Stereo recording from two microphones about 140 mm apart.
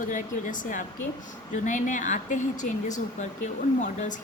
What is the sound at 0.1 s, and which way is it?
A woman's voice, 70° left (ahead or behind).